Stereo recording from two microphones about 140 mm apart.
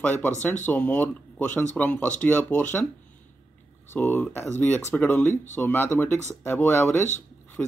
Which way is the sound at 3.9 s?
15° left (ahead or behind).